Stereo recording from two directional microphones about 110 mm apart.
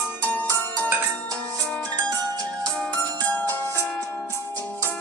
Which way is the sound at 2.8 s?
15° left (ahead or behind).